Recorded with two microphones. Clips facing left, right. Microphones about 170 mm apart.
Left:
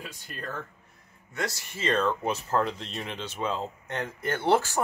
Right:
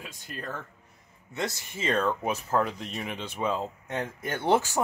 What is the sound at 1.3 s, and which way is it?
Speech, 20° right (ahead or behind).